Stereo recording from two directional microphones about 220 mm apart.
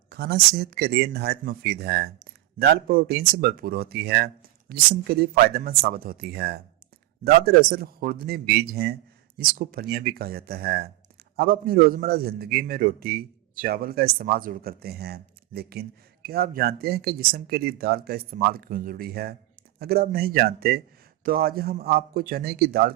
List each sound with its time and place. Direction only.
0.1 s a man's voice: 45° right (ahead or behind)